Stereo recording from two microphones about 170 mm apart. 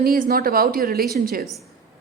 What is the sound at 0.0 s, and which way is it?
Speech, 65° right (ahead or behind).